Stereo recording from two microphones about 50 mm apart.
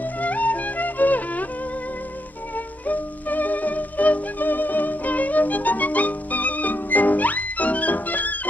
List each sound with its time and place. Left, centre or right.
0.2 s music: left
2.9 s music: left